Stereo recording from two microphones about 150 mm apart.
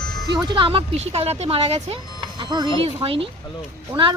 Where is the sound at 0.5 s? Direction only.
35° right (ahead or behind).